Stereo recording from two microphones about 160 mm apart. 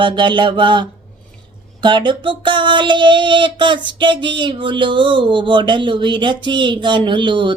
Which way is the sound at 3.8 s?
30° right (ahead or behind).